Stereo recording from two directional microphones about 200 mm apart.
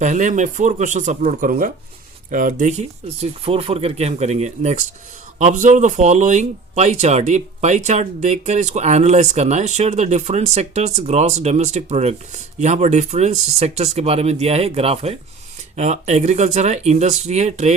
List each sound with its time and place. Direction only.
0.0 s speech: 35° right (ahead or behind)